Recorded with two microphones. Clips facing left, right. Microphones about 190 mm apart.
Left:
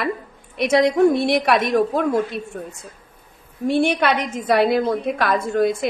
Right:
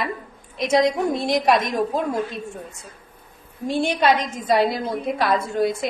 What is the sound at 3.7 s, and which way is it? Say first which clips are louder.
A woman's voice: left 1 dB; 60° left (ahead or behind).